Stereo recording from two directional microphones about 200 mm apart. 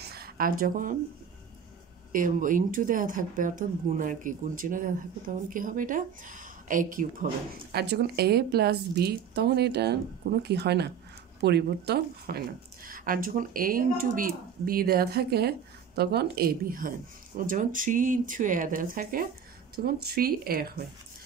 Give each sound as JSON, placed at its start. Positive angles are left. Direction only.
{"t": 0.0, "sound": "a sound", "side_deg": -50}
{"t": 2.1, "sound": "speech", "side_deg": -40}
{"t": 7.7, "sound": "a woman's voice", "side_deg": -55}